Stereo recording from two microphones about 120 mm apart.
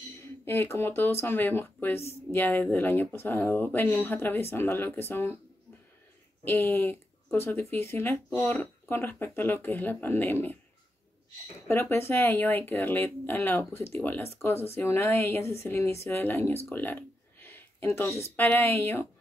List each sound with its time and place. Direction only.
0.5 s speech: 20° left (ahead or behind)
6.4 s speech: 15° left (ahead or behind)
11.6 s speech: 20° left (ahead or behind)